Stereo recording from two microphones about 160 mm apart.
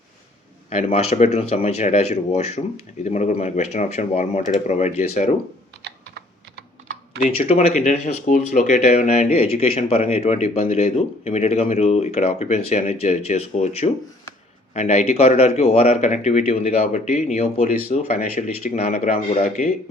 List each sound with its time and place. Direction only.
0.7 s speech: 40° left (ahead or behind)
7.3 s speech: 40° left (ahead or behind)